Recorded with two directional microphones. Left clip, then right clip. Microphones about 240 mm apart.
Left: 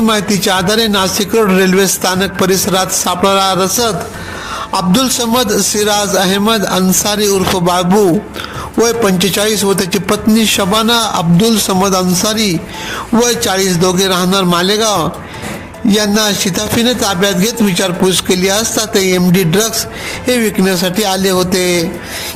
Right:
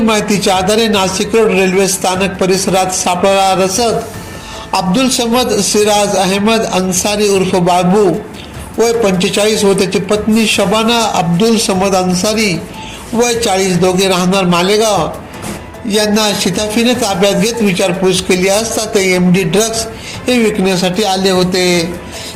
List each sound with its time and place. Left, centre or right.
0.4 s a man's voice: left
4.7 s a man's voice: left
19.1 s music: left
19.5 s a man's voice: left